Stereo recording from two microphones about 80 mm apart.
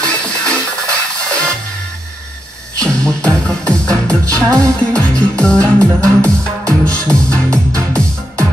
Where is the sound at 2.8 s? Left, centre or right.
Centre.